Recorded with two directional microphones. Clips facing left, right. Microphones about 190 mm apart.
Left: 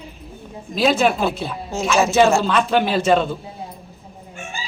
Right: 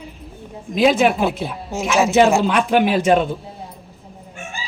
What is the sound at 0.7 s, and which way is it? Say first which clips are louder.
Speech: right 2 dB; 15° right (ahead or behind).